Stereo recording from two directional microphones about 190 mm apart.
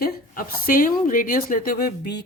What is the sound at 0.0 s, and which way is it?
A woman's voice, 50° left (ahead or behind).